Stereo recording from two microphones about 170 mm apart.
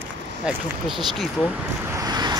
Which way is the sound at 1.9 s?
25° right (ahead or behind).